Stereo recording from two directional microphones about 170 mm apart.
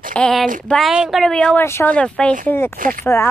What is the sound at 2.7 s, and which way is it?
Speech, 55° right (ahead or behind).